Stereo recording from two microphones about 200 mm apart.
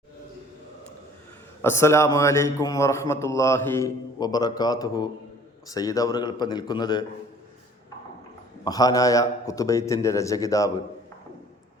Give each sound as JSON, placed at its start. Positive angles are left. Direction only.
{"t": 1.6, "sound": "a man's voice", "side_deg": 15}
{"t": 8.6, "sound": "a man's voice", "side_deg": 20}